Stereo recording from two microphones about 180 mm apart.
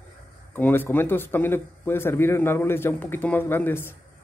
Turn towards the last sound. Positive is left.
turn(degrees=10)  # may be behind; listen again after turning